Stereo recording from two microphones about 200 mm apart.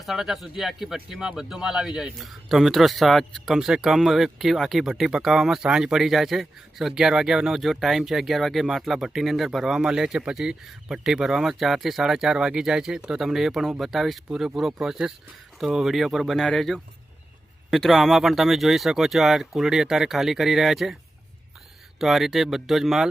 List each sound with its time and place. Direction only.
0.0 s speech: centre (ahead or behind)
21.9 s speech: centre (ahead or behind)